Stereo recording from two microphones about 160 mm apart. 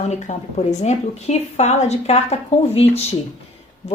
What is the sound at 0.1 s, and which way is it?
Speech, 45° left (ahead or behind).